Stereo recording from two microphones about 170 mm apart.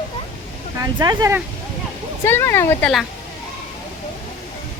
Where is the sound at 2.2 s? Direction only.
15° left (ahead or behind).